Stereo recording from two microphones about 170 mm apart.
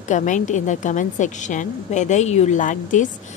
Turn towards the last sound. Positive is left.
turn(degrees=50)  # may be behind; listen again after turning